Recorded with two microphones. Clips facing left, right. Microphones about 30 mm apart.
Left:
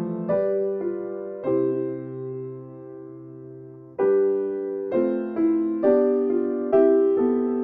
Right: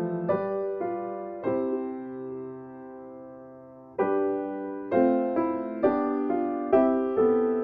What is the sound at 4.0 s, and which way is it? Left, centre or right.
Music, centre.